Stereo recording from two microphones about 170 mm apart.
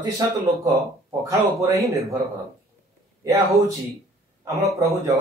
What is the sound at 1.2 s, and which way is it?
Speech, 20° right (ahead or behind).